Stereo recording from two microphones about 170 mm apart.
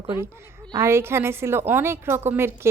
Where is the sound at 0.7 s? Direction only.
15° right (ahead or behind).